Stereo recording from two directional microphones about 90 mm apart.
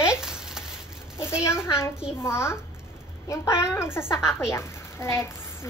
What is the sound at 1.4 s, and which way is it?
A woman's voice, 30° left (ahead or behind).